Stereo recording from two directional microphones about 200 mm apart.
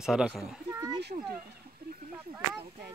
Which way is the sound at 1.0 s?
55° right (ahead or behind).